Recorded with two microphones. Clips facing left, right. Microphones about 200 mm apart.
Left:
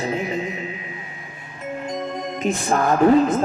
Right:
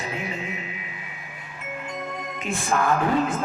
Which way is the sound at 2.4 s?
40° left (ahead or behind).